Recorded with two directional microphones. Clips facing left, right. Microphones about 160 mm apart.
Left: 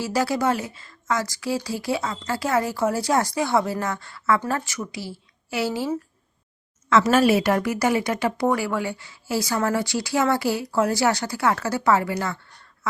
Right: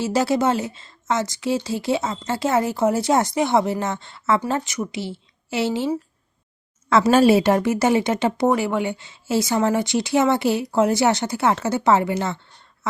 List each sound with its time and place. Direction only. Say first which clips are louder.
0.0 s a woman's voice: right 3 dB; 25° right (ahead or behind)
6.9 s a woman's voice: right 3 dB; 30° right (ahead or behind)
12.8 s goose: right 2 dB; 25° right (ahead or behind)